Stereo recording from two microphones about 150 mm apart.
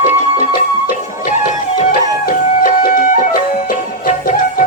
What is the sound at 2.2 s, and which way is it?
Music, 65° left (ahead or behind).